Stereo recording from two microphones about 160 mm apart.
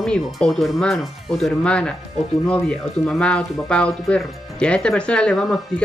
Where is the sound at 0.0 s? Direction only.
5° left (ahead or behind).